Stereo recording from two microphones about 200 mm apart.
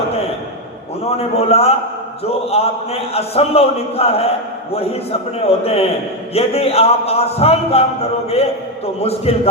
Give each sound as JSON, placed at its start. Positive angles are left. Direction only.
{"t": 1.0, "sound": "a man's voice", "side_deg": 30}
{"t": 9.0, "sound": "a man's voice", "side_deg": 30}